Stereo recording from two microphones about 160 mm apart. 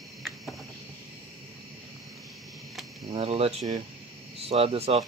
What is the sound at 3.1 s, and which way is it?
Speech, 40° right (ahead or behind).